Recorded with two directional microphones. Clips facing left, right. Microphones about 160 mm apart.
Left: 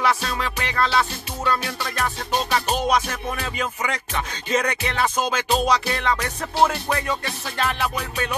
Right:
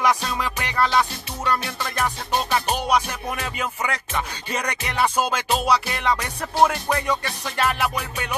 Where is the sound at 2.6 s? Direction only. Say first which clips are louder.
Left 1 dB; 15° right (ahead or behind).